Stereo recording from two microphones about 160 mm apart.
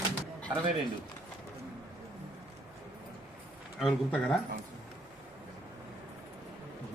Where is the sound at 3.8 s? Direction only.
5° left (ahead or behind).